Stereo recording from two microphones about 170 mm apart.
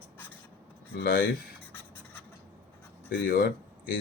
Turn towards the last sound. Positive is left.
turn(degrees=60)  # may be behind; listen again after turning